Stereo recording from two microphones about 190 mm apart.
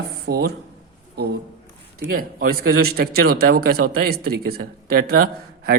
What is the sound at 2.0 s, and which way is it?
A man's voice, 50° right (ahead or behind).